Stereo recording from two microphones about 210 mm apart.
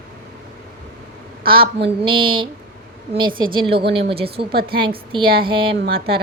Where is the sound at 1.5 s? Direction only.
45° right (ahead or behind).